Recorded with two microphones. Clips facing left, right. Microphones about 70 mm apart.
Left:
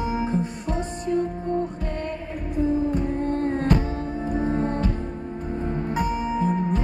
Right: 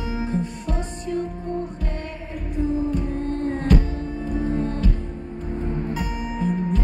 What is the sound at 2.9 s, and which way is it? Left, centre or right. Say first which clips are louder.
Music: left 1 dB; left.